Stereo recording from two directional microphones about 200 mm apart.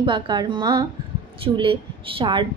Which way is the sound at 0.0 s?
20° right (ahead or behind).